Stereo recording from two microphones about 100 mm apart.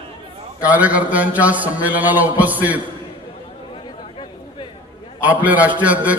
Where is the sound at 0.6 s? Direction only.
15° right (ahead or behind).